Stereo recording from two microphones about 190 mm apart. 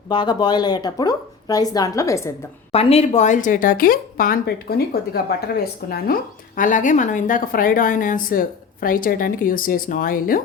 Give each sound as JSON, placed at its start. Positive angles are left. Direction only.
{"t": 0.1, "sound": "a woman's voice", "side_deg": 25}
{"t": 2.7, "sound": "a woman's voice", "side_deg": 35}
{"t": 6.6, "sound": "a woman's voice", "side_deg": 40}